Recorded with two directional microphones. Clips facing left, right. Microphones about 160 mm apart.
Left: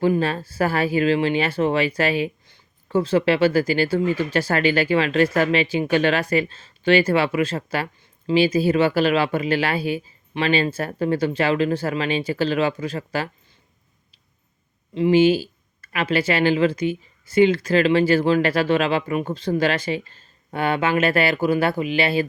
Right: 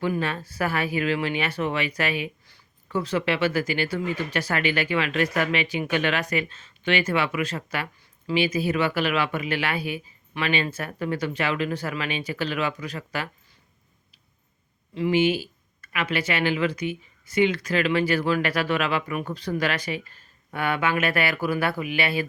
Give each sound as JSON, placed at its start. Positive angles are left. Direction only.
{"t": 0.0, "sound": "speech", "side_deg": 30}
{"t": 14.9, "sound": "speech", "side_deg": 25}